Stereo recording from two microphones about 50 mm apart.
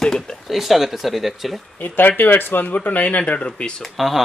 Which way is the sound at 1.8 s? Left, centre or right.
Left.